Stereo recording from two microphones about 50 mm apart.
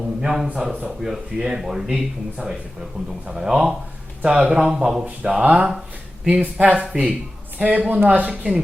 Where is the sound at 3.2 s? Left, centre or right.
Centre.